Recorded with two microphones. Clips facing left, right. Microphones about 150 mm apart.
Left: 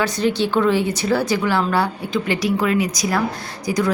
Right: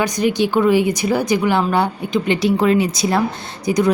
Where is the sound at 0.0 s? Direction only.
15° right (ahead or behind).